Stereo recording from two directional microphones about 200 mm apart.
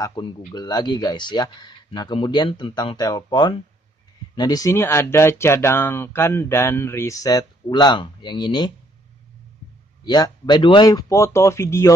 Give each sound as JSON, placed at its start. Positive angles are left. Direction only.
{"t": 0.0, "sound": "speech", "side_deg": 25}
{"t": 10.0, "sound": "speech", "side_deg": 20}